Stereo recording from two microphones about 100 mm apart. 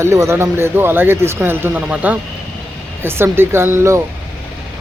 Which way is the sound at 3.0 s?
25° right (ahead or behind).